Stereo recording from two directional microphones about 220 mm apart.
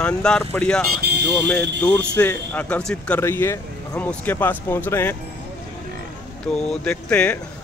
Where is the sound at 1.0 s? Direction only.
50° right (ahead or behind).